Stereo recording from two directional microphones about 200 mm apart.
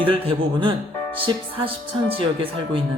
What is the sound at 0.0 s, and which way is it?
Speech, 25° right (ahead or behind).